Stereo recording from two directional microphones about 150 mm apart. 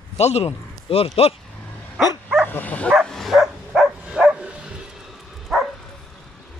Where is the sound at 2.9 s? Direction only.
Centre (ahead or behind).